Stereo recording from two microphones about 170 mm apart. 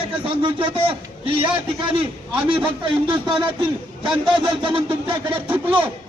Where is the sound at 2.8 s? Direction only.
30° right (ahead or behind).